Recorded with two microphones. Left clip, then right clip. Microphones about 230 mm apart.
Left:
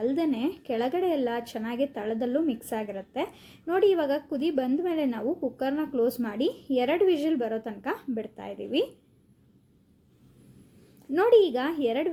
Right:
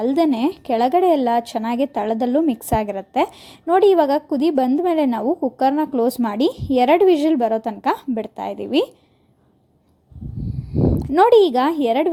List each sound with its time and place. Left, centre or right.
0.0 s speech: right
11.1 s speech: right